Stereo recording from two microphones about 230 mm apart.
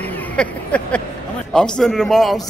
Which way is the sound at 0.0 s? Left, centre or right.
Centre.